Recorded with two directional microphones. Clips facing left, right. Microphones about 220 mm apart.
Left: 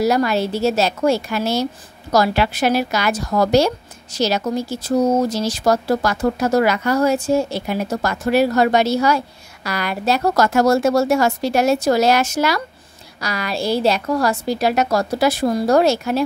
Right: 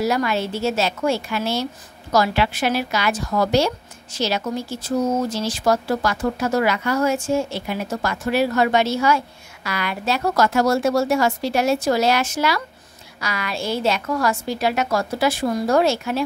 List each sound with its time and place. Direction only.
0.0 s a woman's voice: 40° left (ahead or behind)